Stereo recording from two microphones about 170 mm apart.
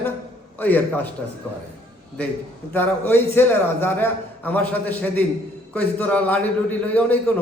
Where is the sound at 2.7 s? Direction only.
10° left (ahead or behind).